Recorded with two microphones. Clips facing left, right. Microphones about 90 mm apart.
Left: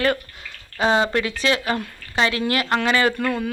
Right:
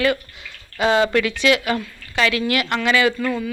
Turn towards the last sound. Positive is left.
turn(degrees=40)  # may be behind; listen again after turning